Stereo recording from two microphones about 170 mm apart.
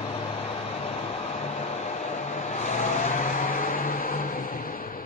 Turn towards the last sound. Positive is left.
turn(degrees=55)  # may be behind; listen again after turning